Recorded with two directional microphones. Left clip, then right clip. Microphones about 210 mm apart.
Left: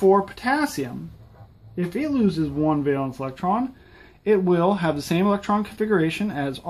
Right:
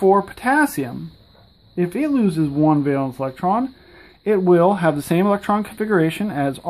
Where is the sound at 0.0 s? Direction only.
30° right (ahead or behind).